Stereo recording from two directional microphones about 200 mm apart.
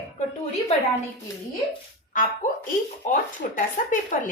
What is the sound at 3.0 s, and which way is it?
Speech, 40° left (ahead or behind).